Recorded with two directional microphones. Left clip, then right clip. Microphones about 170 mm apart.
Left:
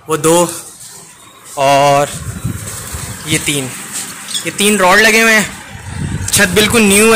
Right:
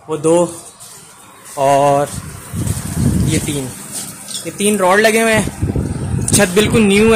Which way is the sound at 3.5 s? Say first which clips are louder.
Left 5 dB; 10° right (ahead or behind).